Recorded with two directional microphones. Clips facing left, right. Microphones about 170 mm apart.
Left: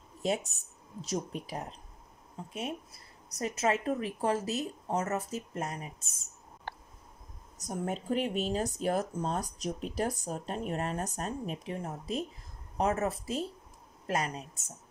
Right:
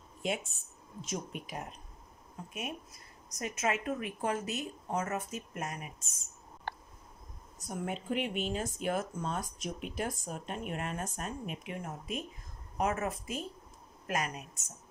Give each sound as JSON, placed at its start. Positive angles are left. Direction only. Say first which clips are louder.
{"t": 0.2, "sound": "speech", "louder": "left 4 dB", "side_deg": 40}
{"t": 7.6, "sound": "speech", "louder": "left 3 dB", "side_deg": 40}